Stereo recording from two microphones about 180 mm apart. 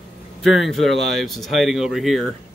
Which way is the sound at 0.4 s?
Centre (ahead or behind).